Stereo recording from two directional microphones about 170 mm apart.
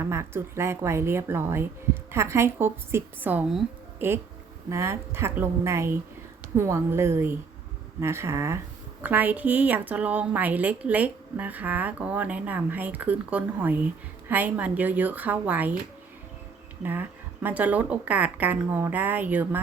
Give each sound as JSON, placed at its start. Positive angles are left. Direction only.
{"t": 0.0, "sound": "a woman's voice", "side_deg": -15}
{"t": 16.8, "sound": "a woman's voice", "side_deg": -10}